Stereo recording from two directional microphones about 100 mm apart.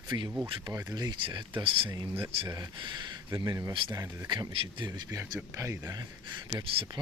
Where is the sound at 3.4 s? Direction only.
30° right (ahead or behind).